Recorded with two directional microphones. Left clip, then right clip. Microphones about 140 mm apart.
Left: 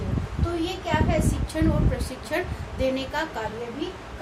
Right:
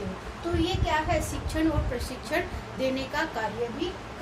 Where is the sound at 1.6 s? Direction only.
35° left (ahead or behind).